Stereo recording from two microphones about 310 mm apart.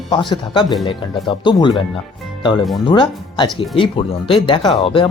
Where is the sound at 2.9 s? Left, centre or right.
Centre.